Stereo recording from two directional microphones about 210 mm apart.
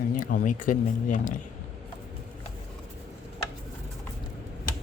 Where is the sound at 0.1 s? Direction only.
40° left (ahead or behind).